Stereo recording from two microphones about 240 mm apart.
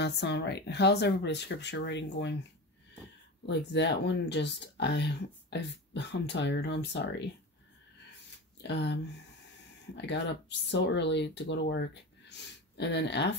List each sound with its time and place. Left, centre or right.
0.0 s speech: left
3.4 s speech: left
8.6 s speech: left